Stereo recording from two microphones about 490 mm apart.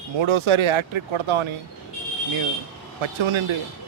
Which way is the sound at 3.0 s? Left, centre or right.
Right.